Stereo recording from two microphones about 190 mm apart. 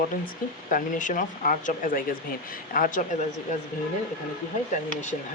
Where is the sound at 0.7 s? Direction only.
45° left (ahead or behind).